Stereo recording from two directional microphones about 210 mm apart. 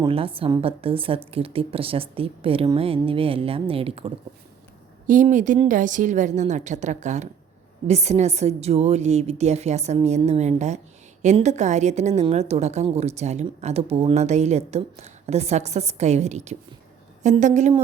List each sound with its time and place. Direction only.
0.0 s a woman's voice: 25° right (ahead or behind)
5.0 s a woman's voice: 35° right (ahead or behind)